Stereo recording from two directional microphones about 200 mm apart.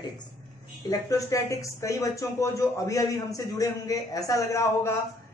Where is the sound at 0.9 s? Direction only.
15° left (ahead or behind).